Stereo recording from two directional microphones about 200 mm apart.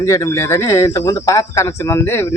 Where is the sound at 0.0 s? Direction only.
15° left (ahead or behind).